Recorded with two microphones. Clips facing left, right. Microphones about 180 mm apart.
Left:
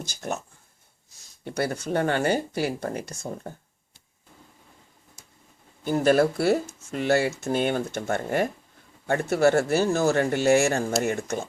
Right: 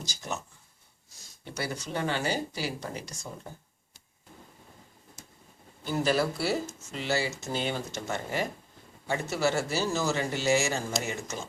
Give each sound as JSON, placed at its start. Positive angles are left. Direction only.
{"t": 0.0, "sound": "speech", "side_deg": 55}
{"t": 1.5, "sound": "speech", "side_deg": 55}
{"t": 5.8, "sound": "speech", "side_deg": 50}